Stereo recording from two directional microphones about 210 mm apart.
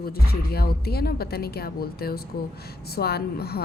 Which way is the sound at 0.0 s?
45° left (ahead or behind).